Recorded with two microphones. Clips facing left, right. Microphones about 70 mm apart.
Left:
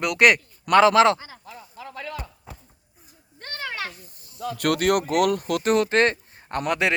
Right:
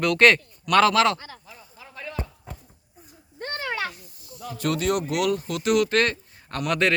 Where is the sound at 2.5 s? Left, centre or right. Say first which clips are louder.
Right 2 dB; centre.